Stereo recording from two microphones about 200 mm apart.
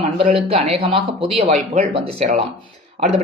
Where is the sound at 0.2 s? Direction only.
30° right (ahead or behind).